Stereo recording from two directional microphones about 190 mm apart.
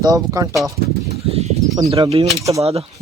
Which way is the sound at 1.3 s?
35° right (ahead or behind).